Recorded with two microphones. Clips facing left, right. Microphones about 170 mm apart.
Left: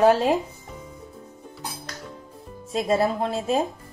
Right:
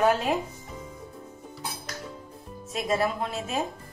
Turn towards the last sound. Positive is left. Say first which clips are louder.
# left 6 dB
turn(degrees=35)  # may be behind; listen again after turning